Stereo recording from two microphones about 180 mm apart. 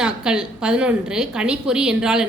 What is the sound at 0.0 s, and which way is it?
A woman's voice, 5° right (ahead or behind).